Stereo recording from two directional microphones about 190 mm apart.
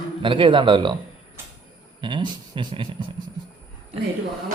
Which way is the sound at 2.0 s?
25° right (ahead or behind).